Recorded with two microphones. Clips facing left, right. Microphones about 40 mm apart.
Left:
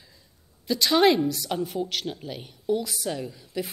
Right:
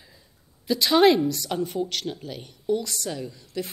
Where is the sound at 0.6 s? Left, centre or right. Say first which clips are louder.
Right 2 dB; centre.